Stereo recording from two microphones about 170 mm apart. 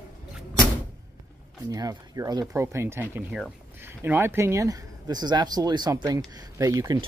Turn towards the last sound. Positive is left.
turn(degrees=-20)  # may be behind; listen again after turning